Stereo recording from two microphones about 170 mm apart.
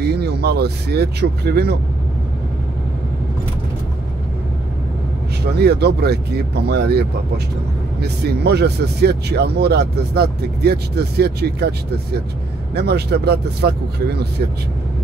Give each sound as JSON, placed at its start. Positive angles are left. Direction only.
{"t": 0.0, "sound": "speech", "side_deg": -70}
{"t": 5.6, "sound": "speech", "side_deg": -70}
{"t": 12.7, "sound": "speech", "side_deg": -75}